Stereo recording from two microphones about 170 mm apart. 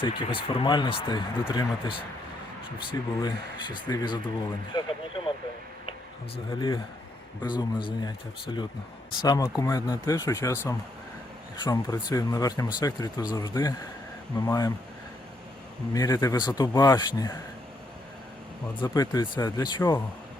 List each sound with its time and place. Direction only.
0.0 s speech: 30° left (ahead or behind)
6.5 s speech: 30° left (ahead or behind)
15.9 s speech: 20° left (ahead or behind)
18.8 s speech: 25° left (ahead or behind)